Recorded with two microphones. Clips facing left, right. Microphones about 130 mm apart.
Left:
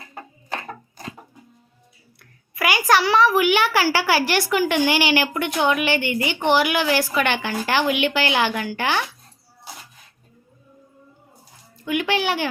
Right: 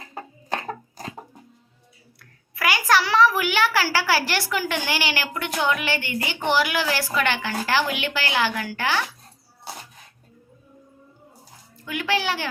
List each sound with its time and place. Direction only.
0.7 s a sound: 40° right (ahead or behind)
2.1 s a woman's voice: 15° left (ahead or behind)
11.9 s a woman's voice: 15° left (ahead or behind)